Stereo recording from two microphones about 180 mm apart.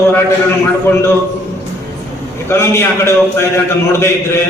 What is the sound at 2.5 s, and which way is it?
Speech, 15° left (ahead or behind).